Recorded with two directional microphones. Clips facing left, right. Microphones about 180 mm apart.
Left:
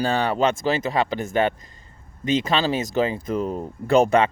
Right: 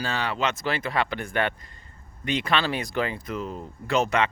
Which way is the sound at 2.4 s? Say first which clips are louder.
Left 4 dB; 40° left (ahead or behind).